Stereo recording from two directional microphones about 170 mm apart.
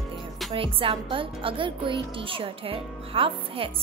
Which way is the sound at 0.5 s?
30° right (ahead or behind).